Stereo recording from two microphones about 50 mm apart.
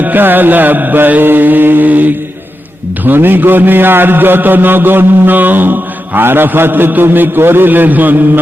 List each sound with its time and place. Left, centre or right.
0.0 s mantra: right
3.0 s a man's voice: right